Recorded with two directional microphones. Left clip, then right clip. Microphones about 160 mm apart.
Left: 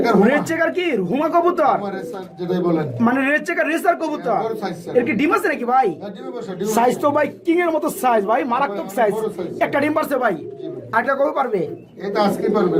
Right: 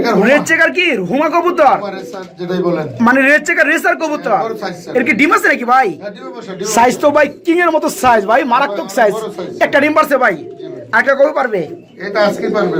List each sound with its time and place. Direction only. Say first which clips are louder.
0.3 s speech: right 8 dB; 20° right (ahead or behind)
2.4 s speech: right 4 dB; centre (ahead or behind)
3.0 s speech: right 11 dB; 20° right (ahead or behind)
12.0 s speech: right 5 dB; centre (ahead or behind)